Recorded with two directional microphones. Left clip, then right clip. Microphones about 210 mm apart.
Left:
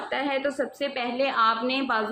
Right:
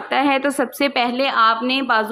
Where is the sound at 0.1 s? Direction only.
40° right (ahead or behind).